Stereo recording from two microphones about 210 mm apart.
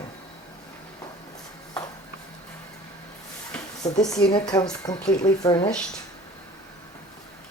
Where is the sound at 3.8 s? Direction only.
20° left (ahead or behind).